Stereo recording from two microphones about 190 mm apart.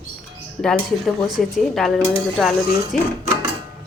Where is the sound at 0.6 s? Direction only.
Centre (ahead or behind).